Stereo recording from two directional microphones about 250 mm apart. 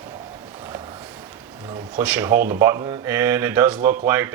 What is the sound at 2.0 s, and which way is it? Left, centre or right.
Speech, centre.